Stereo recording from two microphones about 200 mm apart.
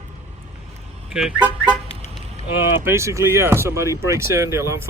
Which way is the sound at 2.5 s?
10° right (ahead or behind).